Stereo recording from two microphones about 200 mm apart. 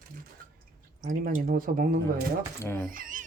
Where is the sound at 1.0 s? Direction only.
45° right (ahead or behind).